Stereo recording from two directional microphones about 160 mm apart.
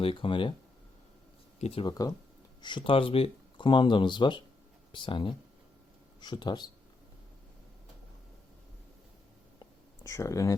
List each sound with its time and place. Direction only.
0.0 s speech: 35° left (ahead or behind)
1.5 s speech: 40° left (ahead or behind)
10.0 s speech: 20° left (ahead or behind)